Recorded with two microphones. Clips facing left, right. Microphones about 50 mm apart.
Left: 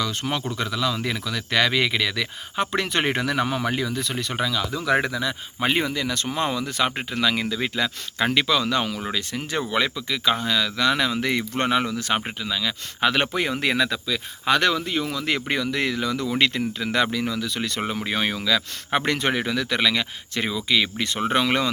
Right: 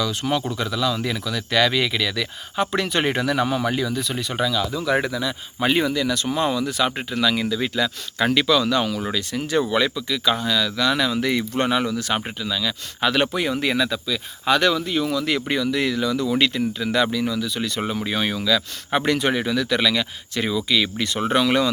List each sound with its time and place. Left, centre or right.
0.0 s speech: left
5.5 s speech: left
15.0 s speech: left
15.4 s speech: left